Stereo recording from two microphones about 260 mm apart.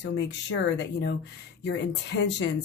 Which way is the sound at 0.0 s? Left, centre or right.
Left.